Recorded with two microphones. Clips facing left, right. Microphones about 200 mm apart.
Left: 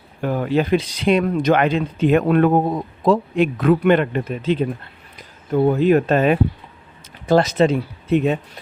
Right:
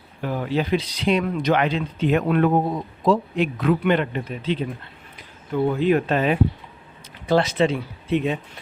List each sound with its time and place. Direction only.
0.2 s speech: 50° left (ahead or behind)